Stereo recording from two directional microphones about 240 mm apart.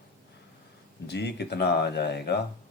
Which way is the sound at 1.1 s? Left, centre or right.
Left.